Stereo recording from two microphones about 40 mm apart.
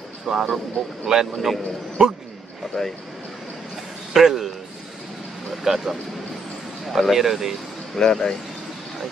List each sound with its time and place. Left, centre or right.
0.3 s speech: centre
2.8 s speech: centre
4.1 s speech: centre
5.5 s speech: centre
7.9 s speech: centre